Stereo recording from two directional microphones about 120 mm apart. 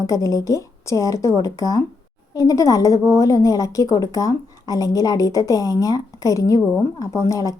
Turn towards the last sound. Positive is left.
turn(degrees=25)  # may be behind; listen again after turning